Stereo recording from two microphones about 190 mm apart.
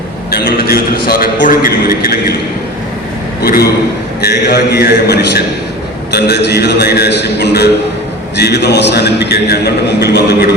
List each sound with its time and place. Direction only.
0.3 s a man's voice: 50° left (ahead or behind)
4.2 s a man's voice: 60° left (ahead or behind)